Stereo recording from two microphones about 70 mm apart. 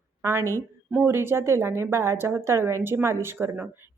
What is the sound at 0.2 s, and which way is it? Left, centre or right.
A woman's voice, right.